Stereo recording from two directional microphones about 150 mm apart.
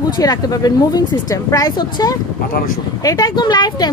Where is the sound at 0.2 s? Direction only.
25° left (ahead or behind).